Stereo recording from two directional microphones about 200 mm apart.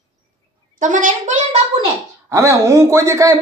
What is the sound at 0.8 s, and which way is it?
Speech, 40° right (ahead or behind).